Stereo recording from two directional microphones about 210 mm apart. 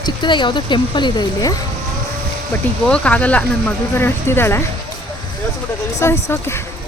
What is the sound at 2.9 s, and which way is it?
Speech, 5° left (ahead or behind).